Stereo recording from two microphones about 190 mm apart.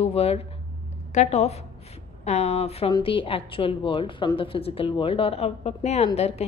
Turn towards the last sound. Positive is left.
turn(degrees=35)  # may be behind; listen again after turning